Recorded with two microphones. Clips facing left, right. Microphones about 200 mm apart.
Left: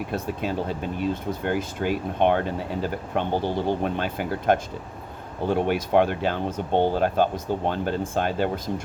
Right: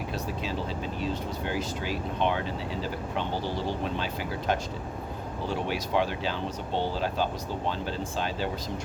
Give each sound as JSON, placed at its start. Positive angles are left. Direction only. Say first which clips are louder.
{"t": 0.1, "sound": "speech", "louder": "left 5 dB", "side_deg": 55}